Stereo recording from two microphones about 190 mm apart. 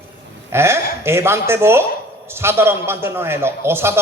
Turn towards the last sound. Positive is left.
turn(degrees=-15)  # may be behind; listen again after turning